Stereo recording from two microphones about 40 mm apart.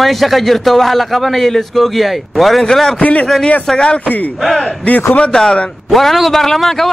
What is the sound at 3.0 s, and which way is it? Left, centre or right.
Speech, left.